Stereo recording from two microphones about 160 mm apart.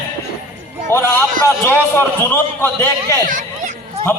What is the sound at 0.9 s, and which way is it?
A man's voice, 15° left (ahead or behind).